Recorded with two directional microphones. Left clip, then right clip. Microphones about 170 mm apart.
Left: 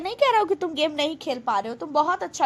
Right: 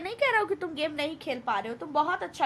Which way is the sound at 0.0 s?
25° left (ahead or behind).